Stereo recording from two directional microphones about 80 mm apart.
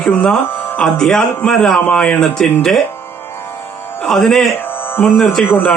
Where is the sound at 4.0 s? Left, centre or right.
Centre.